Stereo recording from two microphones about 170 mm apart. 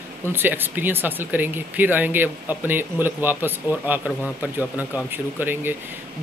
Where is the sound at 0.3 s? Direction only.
10° right (ahead or behind).